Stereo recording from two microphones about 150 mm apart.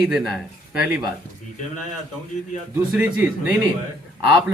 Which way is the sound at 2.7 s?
10° right (ahead or behind).